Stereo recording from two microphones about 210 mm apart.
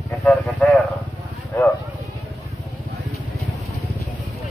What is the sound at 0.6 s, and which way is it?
Speech, 5° left (ahead or behind).